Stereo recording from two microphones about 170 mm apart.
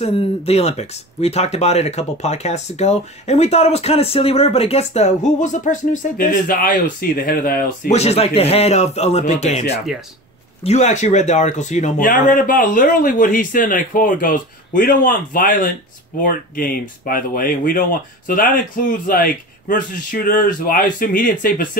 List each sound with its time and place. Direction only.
0.0 s speech: 35° left (ahead or behind); by 7.9 s 60° left (ahead or behind)
7.9 s speech: 40° left (ahead or behind); by 21.6 s 55° left (ahead or behind)